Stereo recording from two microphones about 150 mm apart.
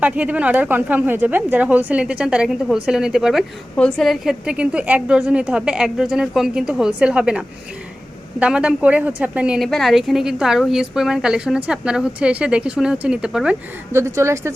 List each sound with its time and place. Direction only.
0.0 s a woman's voice: 10° right (ahead or behind)
13.9 s speech: 20° right (ahead or behind)